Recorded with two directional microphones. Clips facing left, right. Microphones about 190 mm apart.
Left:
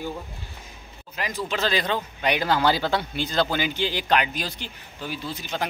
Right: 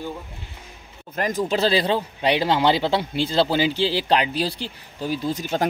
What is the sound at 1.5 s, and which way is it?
Speech, 35° right (ahead or behind).